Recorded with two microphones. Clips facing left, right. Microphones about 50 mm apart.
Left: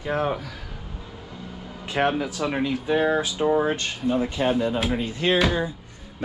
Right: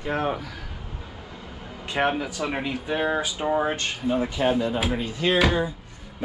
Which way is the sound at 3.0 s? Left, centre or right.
Centre.